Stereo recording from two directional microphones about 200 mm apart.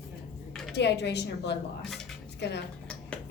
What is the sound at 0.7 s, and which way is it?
A woman's voice, 60° left (ahead or behind).